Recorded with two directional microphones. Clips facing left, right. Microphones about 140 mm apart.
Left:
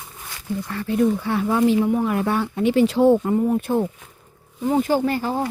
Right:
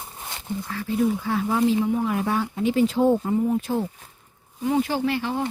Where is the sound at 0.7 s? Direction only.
65° left (ahead or behind).